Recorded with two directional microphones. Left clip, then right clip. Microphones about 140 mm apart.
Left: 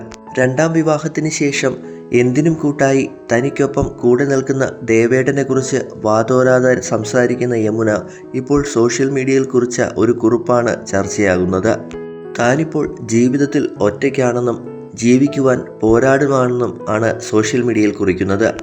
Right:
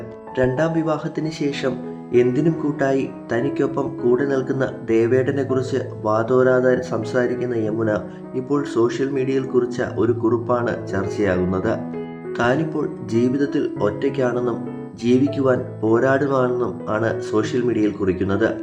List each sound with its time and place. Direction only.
0.3 s speech: 35° left (ahead or behind)